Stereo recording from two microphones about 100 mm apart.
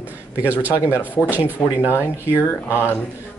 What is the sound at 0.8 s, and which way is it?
Speech, 20° left (ahead or behind).